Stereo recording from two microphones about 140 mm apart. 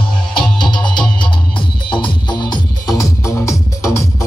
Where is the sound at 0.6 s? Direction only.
35° left (ahead or behind).